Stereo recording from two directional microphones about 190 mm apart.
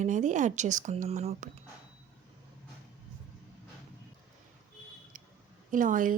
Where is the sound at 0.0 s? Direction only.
40° right (ahead or behind).